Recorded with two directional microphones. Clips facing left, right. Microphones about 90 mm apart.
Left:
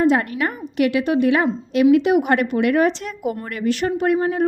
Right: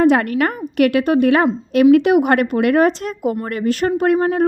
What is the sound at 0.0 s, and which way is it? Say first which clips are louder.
A woman's voice: right 4 dB; 70° right (ahead or behind).